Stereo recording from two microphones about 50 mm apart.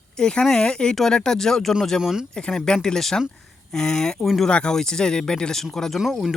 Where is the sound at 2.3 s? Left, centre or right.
Centre.